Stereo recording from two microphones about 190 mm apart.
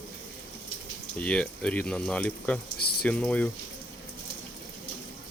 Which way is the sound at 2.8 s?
55° left (ahead or behind).